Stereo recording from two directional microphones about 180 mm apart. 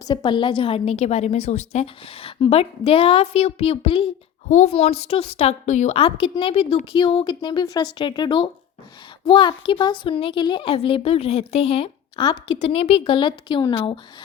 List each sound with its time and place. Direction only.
0.0 s a woman's voice: 25° left (ahead or behind)